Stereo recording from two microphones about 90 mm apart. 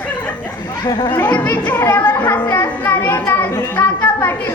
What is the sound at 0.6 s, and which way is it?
Chatter, 55° left (ahead or behind).